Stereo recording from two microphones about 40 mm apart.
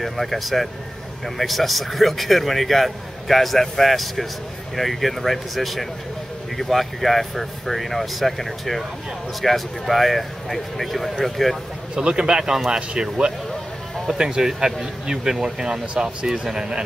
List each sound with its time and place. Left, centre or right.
0.0 s speech: centre
11.9 s a man's voice: centre
12.5 s speech: centre
12.9 s a man's voice: right